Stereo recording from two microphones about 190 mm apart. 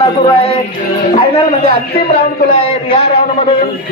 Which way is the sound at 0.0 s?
30° left (ahead or behind).